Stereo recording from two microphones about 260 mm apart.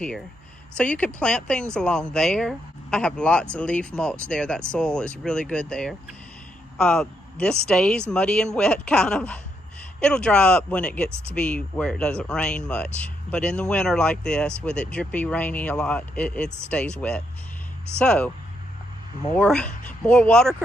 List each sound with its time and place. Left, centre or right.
0.7 s speech: centre
19.3 s speech: centre